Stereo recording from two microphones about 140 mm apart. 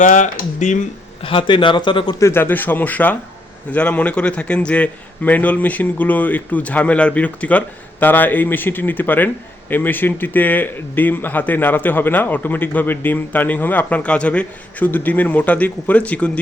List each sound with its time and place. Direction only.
0.0 s speech: 60° left (ahead or behind)
1.2 s speech: 40° left (ahead or behind)
2.1 s a man's voice: 20° left (ahead or behind)